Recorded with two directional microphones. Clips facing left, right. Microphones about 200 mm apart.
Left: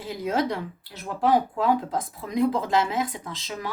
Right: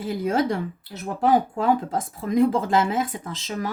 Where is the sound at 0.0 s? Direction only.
50° right (ahead or behind).